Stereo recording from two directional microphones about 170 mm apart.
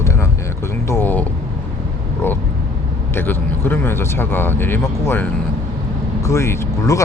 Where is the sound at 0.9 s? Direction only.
10° left (ahead or behind).